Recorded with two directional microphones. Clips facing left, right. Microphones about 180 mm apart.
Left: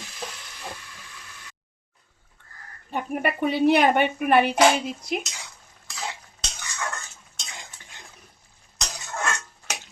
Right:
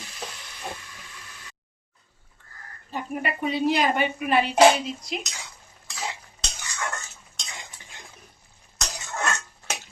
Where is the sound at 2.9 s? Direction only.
60° left (ahead or behind).